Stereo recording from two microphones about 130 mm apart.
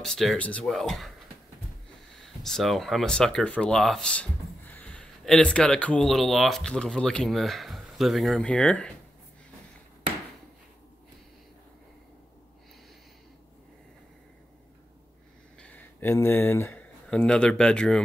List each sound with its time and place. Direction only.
0.0 s speech: centre (ahead or behind)
2.2 s speech: 5° left (ahead or behind)
15.6 s a sound: 15° left (ahead or behind)
17.1 s speech: 5° left (ahead or behind)